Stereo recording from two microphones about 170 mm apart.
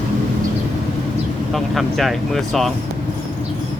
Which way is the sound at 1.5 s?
Centre (ahead or behind).